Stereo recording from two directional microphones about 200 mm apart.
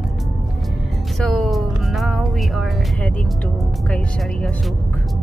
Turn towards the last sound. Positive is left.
turn(degrees=5)  # may be behind; listen again after turning